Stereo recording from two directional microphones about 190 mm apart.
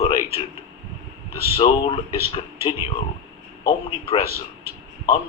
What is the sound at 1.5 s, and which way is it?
Speech, 30° left (ahead or behind).